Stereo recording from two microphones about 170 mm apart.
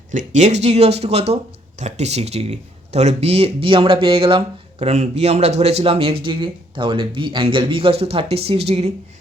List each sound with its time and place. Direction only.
0.1 s speech: 45° right (ahead or behind)